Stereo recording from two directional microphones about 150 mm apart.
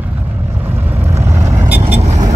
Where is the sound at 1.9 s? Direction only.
50° right (ahead or behind).